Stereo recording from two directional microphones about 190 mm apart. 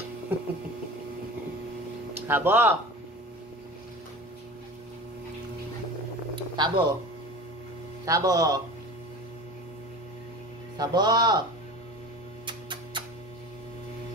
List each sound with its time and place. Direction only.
2.1 s speech: 10° right (ahead or behind)
6.5 s speech: 20° right (ahead or behind)
8.0 s speech: 20° right (ahead or behind)
10.8 s speech: 20° right (ahead or behind)
12.4 s music: 25° right (ahead or behind)